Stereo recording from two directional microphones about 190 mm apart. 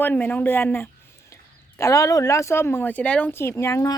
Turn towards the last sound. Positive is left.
turn(degrees=15)  # may be behind; listen again after turning